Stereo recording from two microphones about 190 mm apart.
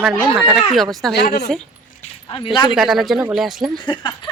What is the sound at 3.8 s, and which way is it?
Speech, 25° left (ahead or behind).